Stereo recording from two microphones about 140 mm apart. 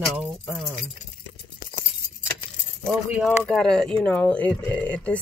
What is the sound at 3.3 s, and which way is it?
Speech, 5° left (ahead or behind).